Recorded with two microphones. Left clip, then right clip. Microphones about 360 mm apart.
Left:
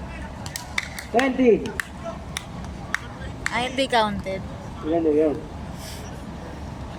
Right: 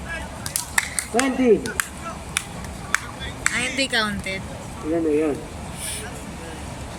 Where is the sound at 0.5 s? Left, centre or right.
Centre.